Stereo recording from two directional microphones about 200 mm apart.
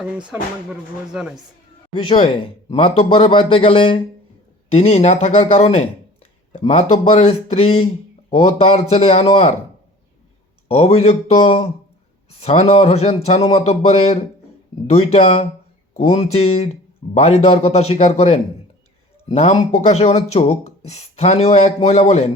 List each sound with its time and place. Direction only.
0.7 s speech: 5° right (ahead or behind)
2.0 s speech: 30° left (ahead or behind)
6.5 s a sound: 30° left (ahead or behind)
7.2 s speech: 30° left (ahead or behind)
10.8 s speech: 30° left (ahead or behind)